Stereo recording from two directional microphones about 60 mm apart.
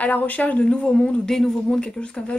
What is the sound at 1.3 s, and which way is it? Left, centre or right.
Speech, centre.